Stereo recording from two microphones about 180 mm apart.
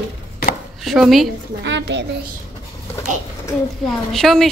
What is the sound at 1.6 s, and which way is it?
Speech, 75° right (ahead or behind).